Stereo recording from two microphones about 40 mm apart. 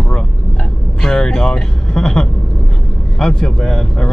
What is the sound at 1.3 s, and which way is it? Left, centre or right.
Speech, centre.